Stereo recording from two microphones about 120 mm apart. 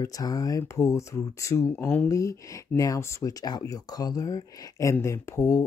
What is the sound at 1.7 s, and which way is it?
Speech, 15° left (ahead or behind).